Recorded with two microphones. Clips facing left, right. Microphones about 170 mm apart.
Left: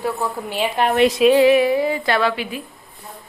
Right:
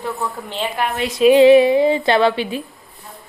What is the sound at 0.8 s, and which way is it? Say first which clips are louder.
Speech: left 4 dB; 25° left (ahead or behind).